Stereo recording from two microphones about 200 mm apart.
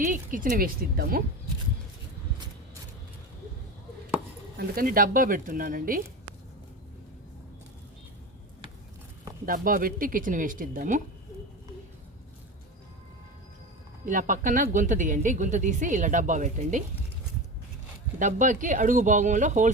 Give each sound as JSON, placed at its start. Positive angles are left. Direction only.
{"t": 0.0, "sound": "speech", "side_deg": -40}
{"t": 4.5, "sound": "speech", "side_deg": -45}
{"t": 9.5, "sound": "speech", "side_deg": -45}
{"t": 14.0, "sound": "a woman's voice", "side_deg": -40}
{"t": 18.2, "sound": "a woman's voice", "side_deg": -40}